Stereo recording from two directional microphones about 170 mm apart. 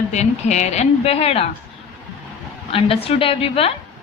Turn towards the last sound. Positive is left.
turn(degrees=35)  # may be behind; listen again after turning